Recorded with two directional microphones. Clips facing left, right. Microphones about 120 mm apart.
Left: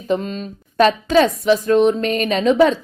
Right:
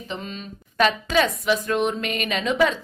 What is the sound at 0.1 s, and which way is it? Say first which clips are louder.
A woman's voice: left 13 dB; 40° left (ahead or behind).